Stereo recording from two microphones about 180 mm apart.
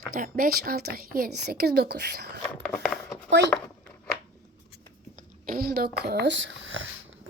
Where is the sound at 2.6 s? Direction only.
5° left (ahead or behind).